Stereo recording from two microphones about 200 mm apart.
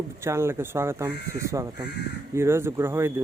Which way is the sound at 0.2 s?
15° right (ahead or behind).